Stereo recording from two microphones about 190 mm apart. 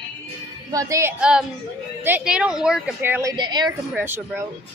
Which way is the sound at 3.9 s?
10° right (ahead or behind).